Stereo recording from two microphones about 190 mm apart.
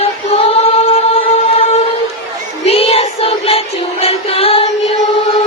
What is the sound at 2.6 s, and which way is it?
Music, 30° left (ahead or behind).